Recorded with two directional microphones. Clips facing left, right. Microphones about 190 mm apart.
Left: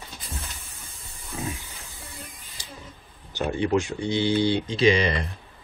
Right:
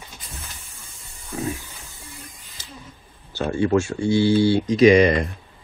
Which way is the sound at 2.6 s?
15° left (ahead or behind).